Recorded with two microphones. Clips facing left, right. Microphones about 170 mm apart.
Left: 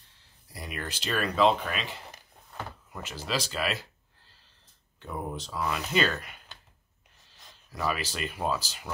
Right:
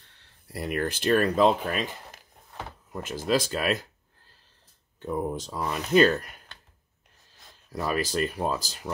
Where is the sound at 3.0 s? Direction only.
50° right (ahead or behind).